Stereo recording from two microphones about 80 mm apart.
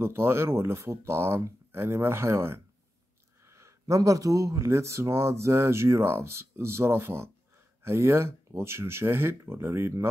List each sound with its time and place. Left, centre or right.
0.0 s speech: right
3.4 s a sound: right
3.8 s speech: right